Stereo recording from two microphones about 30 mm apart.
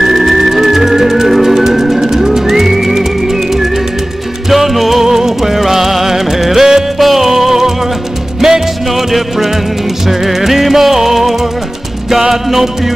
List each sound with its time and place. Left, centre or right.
0.0 s music: centre
10.0 s music: centre